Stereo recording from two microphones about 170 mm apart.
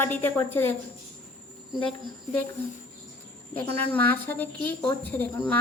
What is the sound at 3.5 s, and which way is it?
A woman's voice, 10° left (ahead or behind).